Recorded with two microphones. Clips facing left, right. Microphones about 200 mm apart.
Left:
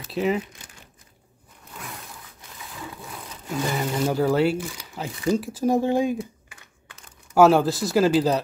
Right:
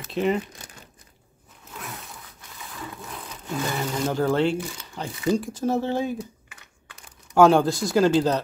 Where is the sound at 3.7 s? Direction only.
10° left (ahead or behind).